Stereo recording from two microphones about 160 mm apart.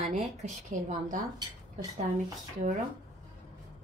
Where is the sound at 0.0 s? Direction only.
45° right (ahead or behind).